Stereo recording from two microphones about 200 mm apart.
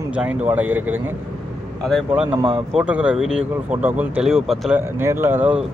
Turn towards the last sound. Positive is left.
turn(degrees=-10)  # may be behind; listen again after turning